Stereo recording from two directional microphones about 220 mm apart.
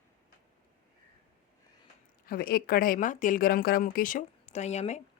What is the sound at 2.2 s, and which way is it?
Speech, 40° left (ahead or behind).